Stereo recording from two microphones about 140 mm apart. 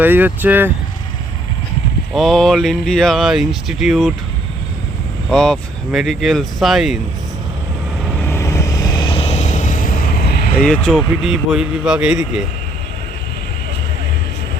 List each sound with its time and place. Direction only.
0.0 s speech: 15° right (ahead or behind)
2.1 s speech: centre (ahead or behind)
5.3 s speech: 5° left (ahead or behind)
8.3 s vehicle: 20° left (ahead or behind); by 10.5 s 90° left
10.9 s speech: 5° right (ahead or behind)